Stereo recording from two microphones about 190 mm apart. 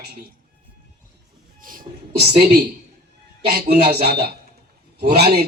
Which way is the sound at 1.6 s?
45° right (ahead or behind).